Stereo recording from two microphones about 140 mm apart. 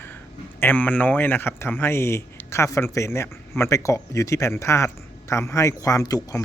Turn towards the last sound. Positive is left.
turn(degrees=25)  # may be behind; listen again after turning